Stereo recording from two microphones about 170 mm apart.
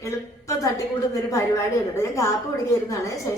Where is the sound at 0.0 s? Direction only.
20° left (ahead or behind).